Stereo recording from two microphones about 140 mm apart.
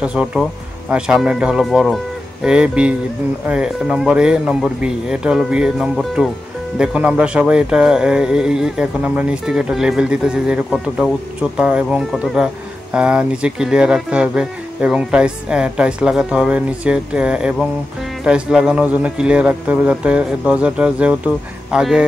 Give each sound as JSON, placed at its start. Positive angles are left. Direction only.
{"t": 0.0, "sound": "speech", "side_deg": -5}